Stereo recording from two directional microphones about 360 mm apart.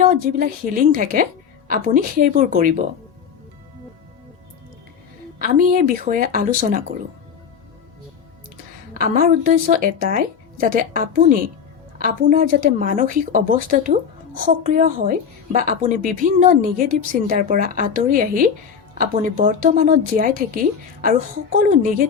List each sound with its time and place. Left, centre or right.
0.0 s a woman's voice: right
5.4 s a woman's voice: right
8.9 s a woman's voice: right
21.5 s a woman's voice: right